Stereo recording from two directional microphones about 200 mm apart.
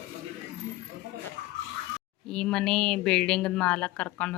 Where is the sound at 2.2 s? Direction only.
5° left (ahead or behind).